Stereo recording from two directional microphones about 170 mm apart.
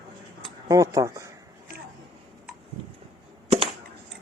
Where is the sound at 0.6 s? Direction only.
20° right (ahead or behind).